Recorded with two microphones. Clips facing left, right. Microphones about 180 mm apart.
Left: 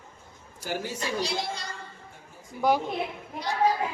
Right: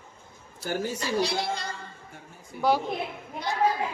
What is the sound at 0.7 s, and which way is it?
Speech, 50° right (ahead or behind).